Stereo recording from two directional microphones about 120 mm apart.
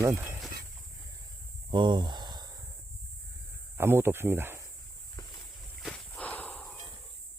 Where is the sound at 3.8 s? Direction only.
20° right (ahead or behind).